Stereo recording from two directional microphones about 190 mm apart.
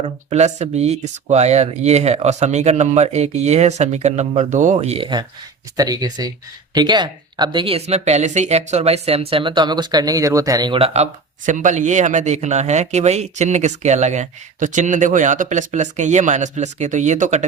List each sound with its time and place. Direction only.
0.0 s speech: 35° right (ahead or behind)